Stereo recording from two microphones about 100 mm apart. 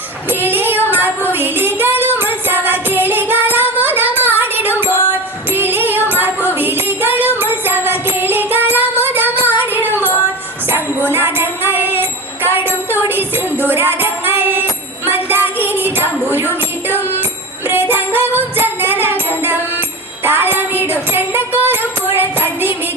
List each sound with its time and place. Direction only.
0.3 s music: 20° right (ahead or behind)